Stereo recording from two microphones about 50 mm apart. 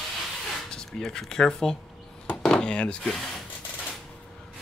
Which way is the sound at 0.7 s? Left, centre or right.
Centre.